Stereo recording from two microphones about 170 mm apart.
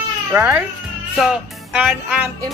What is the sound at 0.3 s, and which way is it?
Speech, 10° right (ahead or behind).